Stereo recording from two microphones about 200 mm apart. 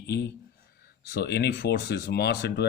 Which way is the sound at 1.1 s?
55° left (ahead or behind).